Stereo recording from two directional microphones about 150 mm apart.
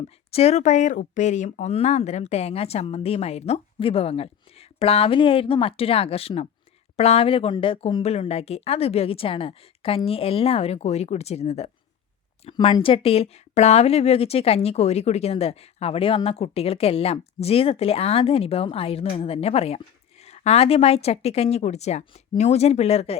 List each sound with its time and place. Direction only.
0.3 s a woman's voice: 45° left (ahead or behind)